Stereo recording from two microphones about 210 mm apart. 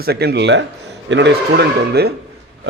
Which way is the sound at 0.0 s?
50° right (ahead or behind).